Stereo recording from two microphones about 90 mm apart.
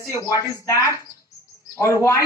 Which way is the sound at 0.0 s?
35° left (ahead or behind).